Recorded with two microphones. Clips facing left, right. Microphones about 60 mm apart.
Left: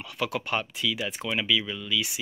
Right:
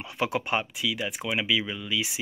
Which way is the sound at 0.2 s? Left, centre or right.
Right.